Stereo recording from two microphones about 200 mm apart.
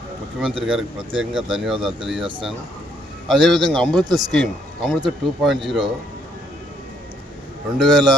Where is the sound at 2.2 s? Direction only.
25° right (ahead or behind).